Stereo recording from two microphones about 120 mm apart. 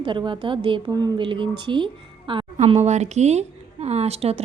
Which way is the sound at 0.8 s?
35° right (ahead or behind).